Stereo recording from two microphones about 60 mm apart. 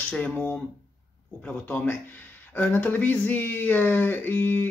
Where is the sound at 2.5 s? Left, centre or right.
Left.